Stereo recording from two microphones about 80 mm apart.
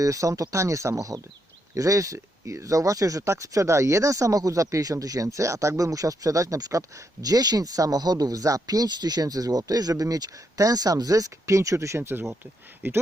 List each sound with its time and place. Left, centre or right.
0.0 s speech: right